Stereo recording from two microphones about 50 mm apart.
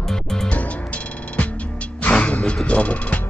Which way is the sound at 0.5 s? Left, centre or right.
Left.